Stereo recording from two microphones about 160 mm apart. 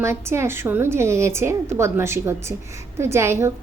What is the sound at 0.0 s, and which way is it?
A woman's voice, 15° right (ahead or behind).